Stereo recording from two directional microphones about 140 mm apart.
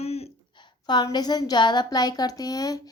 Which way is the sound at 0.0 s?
45° left (ahead or behind).